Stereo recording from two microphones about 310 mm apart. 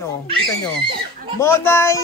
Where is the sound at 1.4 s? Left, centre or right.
Centre.